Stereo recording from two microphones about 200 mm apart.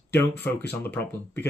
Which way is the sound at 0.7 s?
10° left (ahead or behind).